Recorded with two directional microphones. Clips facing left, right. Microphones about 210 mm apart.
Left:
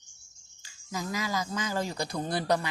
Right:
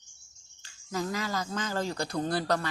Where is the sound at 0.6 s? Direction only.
10° left (ahead or behind).